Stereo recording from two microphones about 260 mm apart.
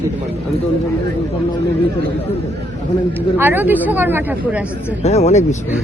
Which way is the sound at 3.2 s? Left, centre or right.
Centre.